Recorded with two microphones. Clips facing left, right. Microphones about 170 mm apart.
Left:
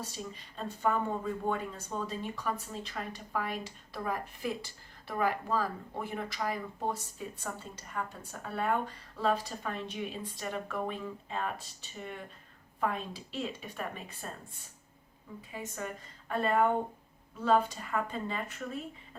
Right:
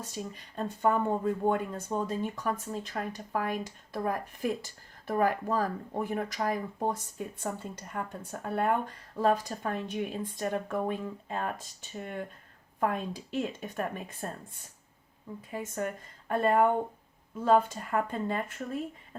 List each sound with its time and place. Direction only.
0.0 s speech: 50° right (ahead or behind)